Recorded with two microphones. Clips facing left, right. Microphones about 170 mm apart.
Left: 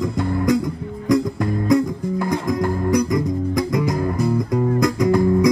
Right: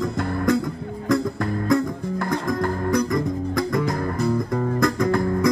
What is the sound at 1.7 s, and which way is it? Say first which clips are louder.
Music: left 4 dB; 20° left (ahead or behind).